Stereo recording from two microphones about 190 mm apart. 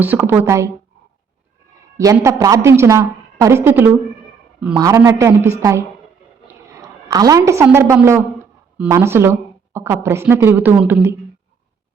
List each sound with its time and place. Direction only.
0.0 s a woman's voice: 10° right (ahead or behind)
2.0 s a woman's voice: 15° right (ahead or behind)
6.5 s a woman's voice: 15° right (ahead or behind)